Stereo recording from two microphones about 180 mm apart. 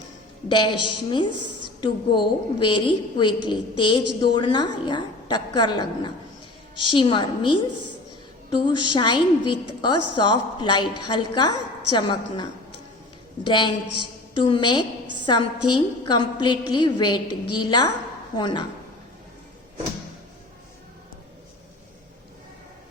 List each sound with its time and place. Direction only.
0.4 s a woman's voice: 25° left (ahead or behind)